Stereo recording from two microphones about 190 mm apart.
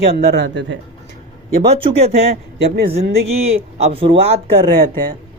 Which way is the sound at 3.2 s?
30° right (ahead or behind).